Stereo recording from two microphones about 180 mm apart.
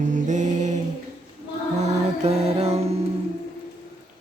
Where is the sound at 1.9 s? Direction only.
35° right (ahead or behind).